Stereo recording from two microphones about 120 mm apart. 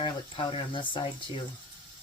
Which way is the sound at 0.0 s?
50° left (ahead or behind).